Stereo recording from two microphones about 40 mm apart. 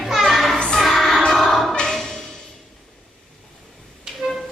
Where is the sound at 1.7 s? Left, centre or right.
Centre.